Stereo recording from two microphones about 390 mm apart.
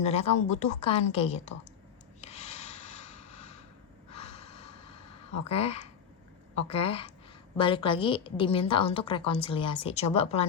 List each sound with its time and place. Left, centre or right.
0.0 s a woman's voice: centre
2.2 s rub: centre
4.2 s a sound: centre
5.5 s a woman's voice: centre